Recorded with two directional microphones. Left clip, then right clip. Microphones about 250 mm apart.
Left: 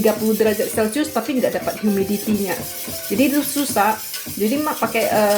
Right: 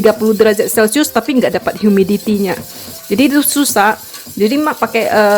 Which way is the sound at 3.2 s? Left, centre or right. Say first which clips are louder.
Right 7 dB; right.